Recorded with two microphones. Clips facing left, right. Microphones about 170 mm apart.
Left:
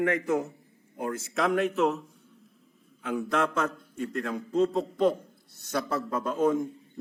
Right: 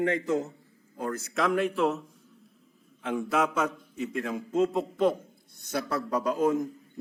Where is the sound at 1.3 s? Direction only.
Centre (ahead or behind).